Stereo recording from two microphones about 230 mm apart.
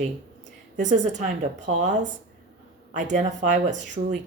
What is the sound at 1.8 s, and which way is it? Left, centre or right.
Speech, right.